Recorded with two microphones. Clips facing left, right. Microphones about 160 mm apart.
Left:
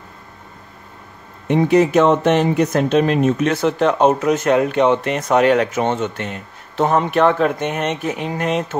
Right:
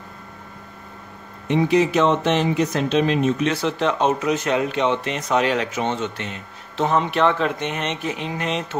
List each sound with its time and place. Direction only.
1.5 s speech: 50° left (ahead or behind)